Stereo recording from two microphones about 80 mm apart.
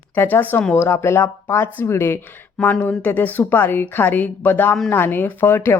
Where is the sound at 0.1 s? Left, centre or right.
Left.